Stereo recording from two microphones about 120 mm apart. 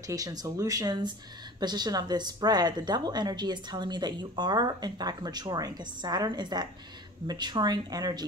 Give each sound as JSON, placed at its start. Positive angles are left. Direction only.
{"t": 0.0, "sound": "a woman's voice", "side_deg": -30}